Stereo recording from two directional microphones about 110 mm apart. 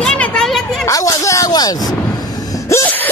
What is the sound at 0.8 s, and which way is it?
Speech, 30° left (ahead or behind).